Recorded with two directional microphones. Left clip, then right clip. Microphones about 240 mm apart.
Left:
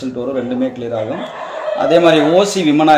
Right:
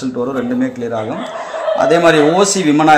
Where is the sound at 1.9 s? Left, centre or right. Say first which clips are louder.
Left 1 dB; right.